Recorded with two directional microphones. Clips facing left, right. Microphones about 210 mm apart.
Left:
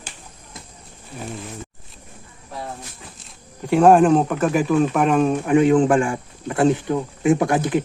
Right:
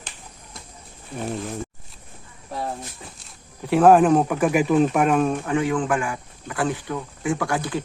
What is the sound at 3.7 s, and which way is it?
Speech, 5° right (ahead or behind).